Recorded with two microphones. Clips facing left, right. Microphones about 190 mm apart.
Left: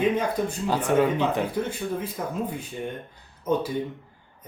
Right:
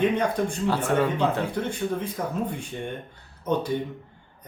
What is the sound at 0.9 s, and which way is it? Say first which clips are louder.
Speech: left 3 dB; 15° left (ahead or behind).